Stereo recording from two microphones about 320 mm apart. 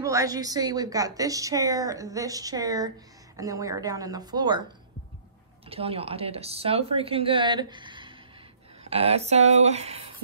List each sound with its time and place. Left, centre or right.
0.0 s a woman's voice: centre
5.7 s a woman's voice: centre